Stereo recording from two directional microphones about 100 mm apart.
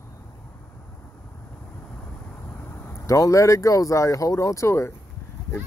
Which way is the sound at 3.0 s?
35° left (ahead or behind).